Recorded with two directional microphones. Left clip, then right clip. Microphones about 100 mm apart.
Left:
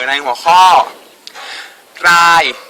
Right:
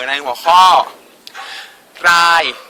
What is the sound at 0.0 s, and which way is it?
Speech, 30° right (ahead or behind).